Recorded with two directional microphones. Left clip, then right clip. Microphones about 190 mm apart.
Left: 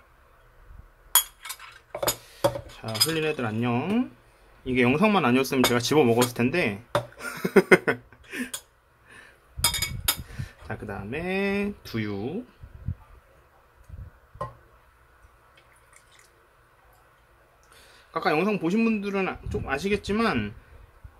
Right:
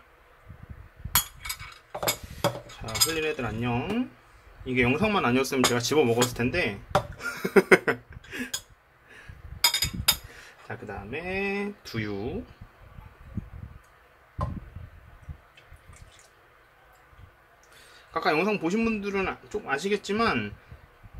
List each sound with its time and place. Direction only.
1.1 s chink: 20° left (ahead or behind)
2.3 s cutlery: 25° left (ahead or behind)
4.6 s speech: 25° left (ahead or behind)
10.7 s speech: 30° left (ahead or behind); by 12.4 s 15° left (ahead or behind)
18.1 s a man's voice: 10° left (ahead or behind)